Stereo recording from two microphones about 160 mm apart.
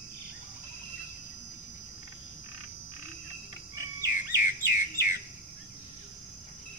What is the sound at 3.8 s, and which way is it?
Bird vocalization, 20° right (ahead or behind).